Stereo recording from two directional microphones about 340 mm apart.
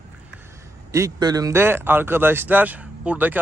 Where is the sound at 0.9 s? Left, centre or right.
Centre.